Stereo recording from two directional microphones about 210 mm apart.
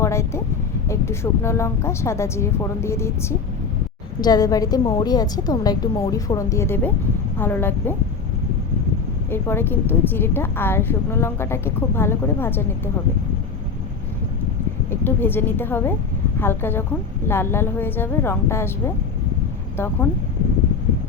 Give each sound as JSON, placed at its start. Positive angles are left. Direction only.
{"t": 0.0, "sound": "a woman's voice", "side_deg": 15}
{"t": 9.3, "sound": "a woman's voice", "side_deg": 10}
{"t": 14.8, "sound": "a woman's voice", "side_deg": 10}
{"t": 19.7, "sound": "a woman's voice", "side_deg": 10}